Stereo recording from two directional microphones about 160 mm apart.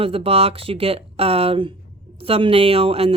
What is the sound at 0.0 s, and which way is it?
Speech, 35° right (ahead or behind).